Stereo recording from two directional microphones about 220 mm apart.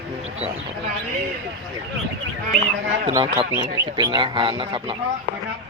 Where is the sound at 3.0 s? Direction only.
25° right (ahead or behind).